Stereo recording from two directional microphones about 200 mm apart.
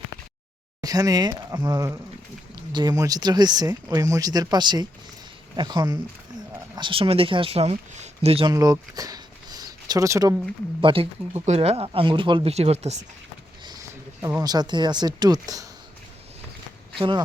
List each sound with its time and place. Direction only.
0.8 s speech: 20° right (ahead or behind)
8.5 s a sound: 15° right (ahead or behind)
10.8 s speech: 25° right (ahead or behind)
14.2 s speech: 15° right (ahead or behind)
17.0 s speech: 20° right (ahead or behind)